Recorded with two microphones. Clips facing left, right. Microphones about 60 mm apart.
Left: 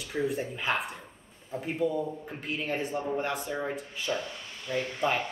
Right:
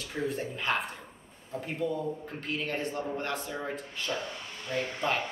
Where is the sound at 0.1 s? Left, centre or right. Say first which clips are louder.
Left 3 dB; centre.